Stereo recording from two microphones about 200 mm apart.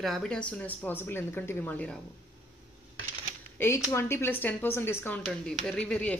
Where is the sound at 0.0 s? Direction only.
Centre (ahead or behind).